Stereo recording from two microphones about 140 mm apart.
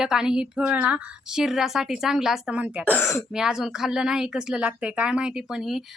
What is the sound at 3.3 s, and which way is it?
Speech, 5° right (ahead or behind).